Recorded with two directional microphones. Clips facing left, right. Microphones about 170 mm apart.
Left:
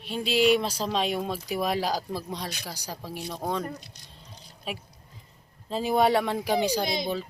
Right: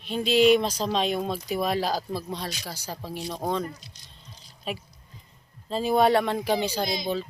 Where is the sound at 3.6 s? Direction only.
55° left (ahead or behind).